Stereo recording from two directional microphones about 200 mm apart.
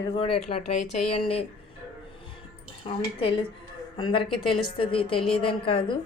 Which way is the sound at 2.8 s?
25° left (ahead or behind).